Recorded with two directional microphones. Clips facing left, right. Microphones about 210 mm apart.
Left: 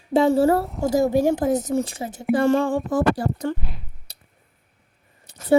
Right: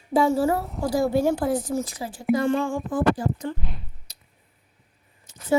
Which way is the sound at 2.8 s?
75° left (ahead or behind).